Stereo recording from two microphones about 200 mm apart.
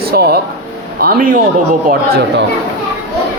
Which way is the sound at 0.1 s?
50° right (ahead or behind).